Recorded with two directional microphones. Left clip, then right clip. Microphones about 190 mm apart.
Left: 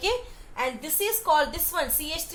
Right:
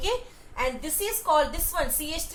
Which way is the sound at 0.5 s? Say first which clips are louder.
Even; 30° left (ahead or behind).